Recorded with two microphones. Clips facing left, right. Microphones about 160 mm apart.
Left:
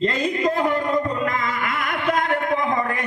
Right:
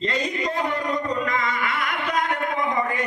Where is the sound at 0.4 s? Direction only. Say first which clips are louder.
Left 7 dB; 50° left (ahead or behind).